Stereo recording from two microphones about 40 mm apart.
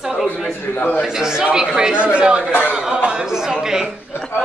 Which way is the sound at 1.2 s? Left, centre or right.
Centre.